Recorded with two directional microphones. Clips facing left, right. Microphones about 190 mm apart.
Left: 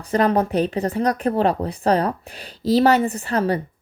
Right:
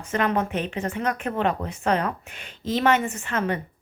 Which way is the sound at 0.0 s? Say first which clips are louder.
Left 5 dB; 35° left (ahead or behind).